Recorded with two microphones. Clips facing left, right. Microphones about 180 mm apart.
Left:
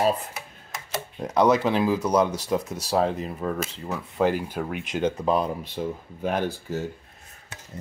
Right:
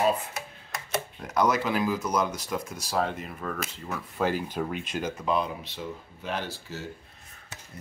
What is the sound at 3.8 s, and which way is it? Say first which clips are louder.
Speech: left 5 dB; 15° left (ahead or behind).